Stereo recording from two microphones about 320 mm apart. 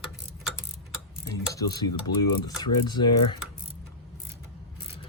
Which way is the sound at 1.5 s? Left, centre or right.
Centre.